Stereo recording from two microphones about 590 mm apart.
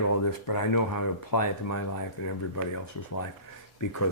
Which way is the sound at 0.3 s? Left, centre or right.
Left.